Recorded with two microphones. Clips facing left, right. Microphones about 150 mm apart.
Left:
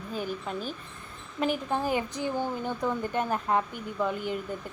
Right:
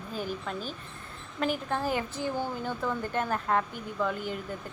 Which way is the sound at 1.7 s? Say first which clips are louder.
Left 2 dB; 15° left (ahead or behind).